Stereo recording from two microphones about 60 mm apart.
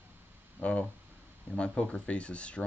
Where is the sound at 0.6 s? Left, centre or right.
Centre.